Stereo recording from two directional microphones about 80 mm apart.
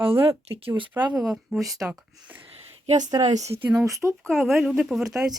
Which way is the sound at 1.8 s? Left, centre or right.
Right.